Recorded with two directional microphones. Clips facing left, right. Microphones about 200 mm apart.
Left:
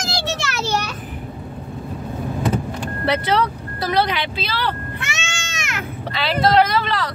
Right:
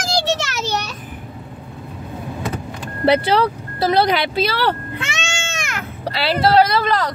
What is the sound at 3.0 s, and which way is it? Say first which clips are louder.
Speech: right 5 dB; 30° right (ahead or behind).